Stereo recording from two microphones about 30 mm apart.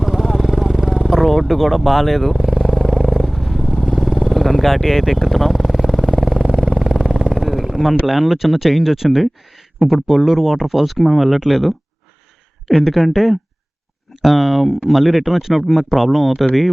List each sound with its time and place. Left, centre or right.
0.0 s vehicle: centre
6.1 s vehicle: centre
7.3 s a sound: centre
8.0 s speech: centre